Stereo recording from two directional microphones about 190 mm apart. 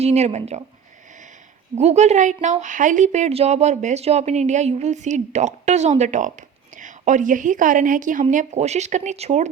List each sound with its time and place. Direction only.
0.0 s a woman's voice: 35° right (ahead or behind)
1.7 s a woman's voice: 35° right (ahead or behind)